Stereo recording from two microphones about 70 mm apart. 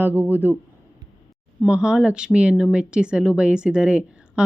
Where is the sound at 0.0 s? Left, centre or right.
Right.